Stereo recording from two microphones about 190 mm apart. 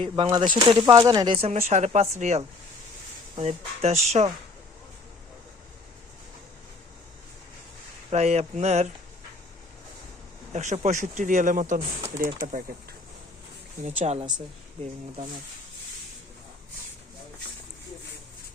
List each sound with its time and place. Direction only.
0.3 s speech: 25° right (ahead or behind)
8.1 s speech: 35° right (ahead or behind)
10.5 s speech: 35° right (ahead or behind)
13.8 s speech: 35° right (ahead or behind)